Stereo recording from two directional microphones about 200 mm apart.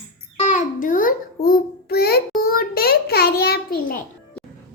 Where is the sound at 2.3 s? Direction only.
50° left (ahead or behind).